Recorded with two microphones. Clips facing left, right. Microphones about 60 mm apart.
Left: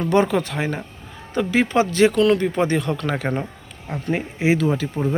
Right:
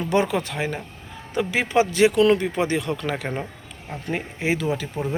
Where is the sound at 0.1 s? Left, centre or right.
Centre.